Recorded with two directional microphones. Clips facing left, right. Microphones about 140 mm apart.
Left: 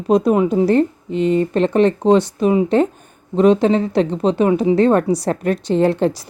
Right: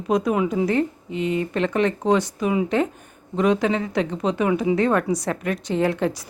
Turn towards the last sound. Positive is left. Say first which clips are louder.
# left 6 dB
turn(degrees=30)  # may be behind; listen again after turning